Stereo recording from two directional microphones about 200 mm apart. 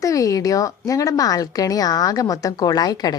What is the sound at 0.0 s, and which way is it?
A woman's voice, 15° left (ahead or behind).